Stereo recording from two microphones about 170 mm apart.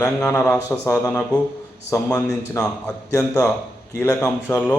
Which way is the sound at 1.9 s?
20° left (ahead or behind).